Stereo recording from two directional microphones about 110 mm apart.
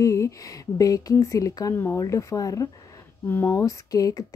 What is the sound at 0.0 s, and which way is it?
Speech, 30° left (ahead or behind).